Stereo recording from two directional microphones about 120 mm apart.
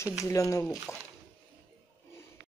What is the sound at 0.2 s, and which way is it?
Speech, 25° left (ahead or behind).